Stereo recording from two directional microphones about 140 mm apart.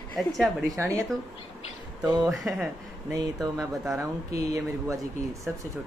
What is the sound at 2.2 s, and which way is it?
Speech, centre (ahead or behind).